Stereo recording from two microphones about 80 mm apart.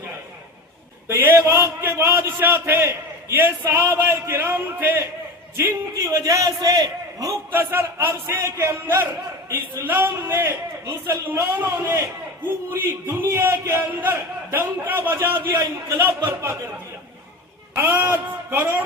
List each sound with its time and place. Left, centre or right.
1.0 s a man's voice: right
5.9 s a man's voice: right
7.5 s a man's voice: right
17.7 s a man's voice: right